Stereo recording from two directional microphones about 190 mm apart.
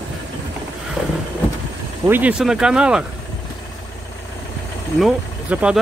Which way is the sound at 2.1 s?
5° right (ahead or behind).